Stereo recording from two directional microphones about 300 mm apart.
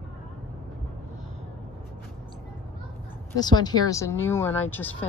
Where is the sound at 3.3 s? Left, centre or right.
Centre.